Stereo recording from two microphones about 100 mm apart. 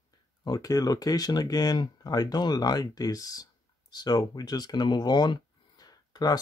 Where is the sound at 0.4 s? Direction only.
40° left (ahead or behind).